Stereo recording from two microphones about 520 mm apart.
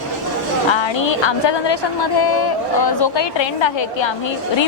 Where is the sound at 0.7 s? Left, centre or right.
Left.